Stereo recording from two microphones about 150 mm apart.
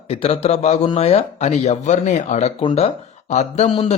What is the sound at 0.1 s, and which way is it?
A man's voice, 40° left (ahead or behind).